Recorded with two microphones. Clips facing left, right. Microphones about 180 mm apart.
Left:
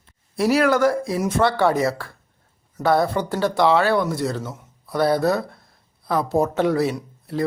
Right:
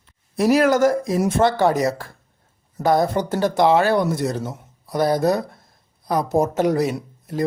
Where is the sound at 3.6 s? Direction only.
20° right (ahead or behind).